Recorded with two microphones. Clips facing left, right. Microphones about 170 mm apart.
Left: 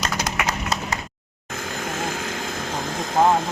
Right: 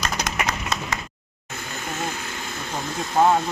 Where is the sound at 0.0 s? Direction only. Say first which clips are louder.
Left 1 dB; 35° left (ahead or behind).